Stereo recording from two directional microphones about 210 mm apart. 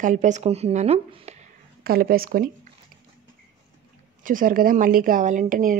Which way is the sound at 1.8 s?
45° right (ahead or behind).